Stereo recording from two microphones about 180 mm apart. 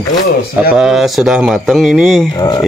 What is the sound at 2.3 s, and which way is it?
Speech, 20° left (ahead or behind).